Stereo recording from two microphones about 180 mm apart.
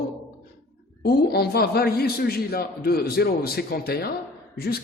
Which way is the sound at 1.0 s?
60° left (ahead or behind).